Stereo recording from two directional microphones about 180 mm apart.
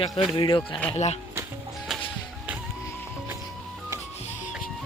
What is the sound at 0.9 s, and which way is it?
Speech, 40° left (ahead or behind).